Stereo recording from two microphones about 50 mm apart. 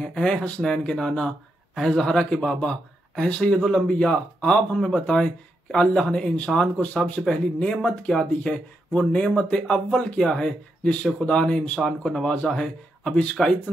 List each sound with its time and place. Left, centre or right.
0.0 s speech: centre
11.8 s speech: centre